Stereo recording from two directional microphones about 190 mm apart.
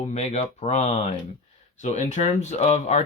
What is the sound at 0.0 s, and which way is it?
Speech, 35° left (ahead or behind).